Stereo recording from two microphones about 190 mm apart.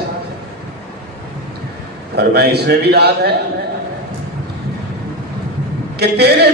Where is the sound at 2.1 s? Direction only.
60° right (ahead or behind).